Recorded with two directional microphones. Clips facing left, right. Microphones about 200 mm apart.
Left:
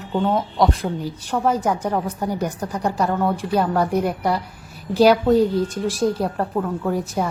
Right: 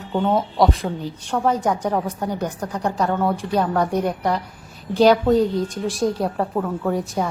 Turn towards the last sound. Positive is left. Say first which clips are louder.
# even
turn(degrees=0)  # may be behind; listen again after turning